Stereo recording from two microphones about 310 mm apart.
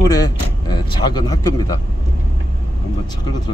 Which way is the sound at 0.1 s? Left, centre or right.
Centre.